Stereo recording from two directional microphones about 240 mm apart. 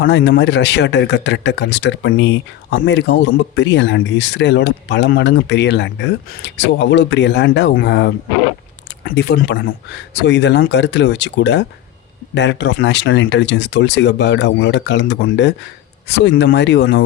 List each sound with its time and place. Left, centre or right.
0.0 s speech: left